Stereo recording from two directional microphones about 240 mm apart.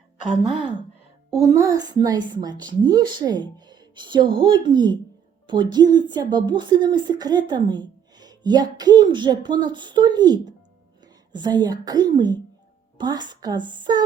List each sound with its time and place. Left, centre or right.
0.2 s a woman's voice: left
1.3 s a woman's voice: centre